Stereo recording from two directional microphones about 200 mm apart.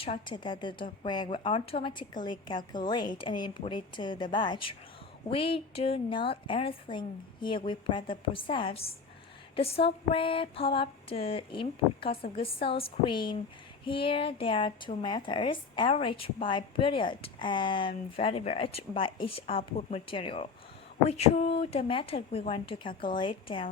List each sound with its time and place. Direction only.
0.0 s speech: 25° left (ahead or behind)